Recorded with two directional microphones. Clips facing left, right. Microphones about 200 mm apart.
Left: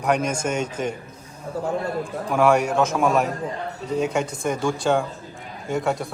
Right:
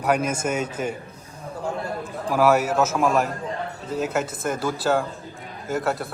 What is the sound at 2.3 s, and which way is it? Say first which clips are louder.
A man's voice: even; 5° right (ahead or behind).